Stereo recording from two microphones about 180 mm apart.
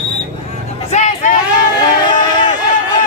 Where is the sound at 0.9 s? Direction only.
40° left (ahead or behind).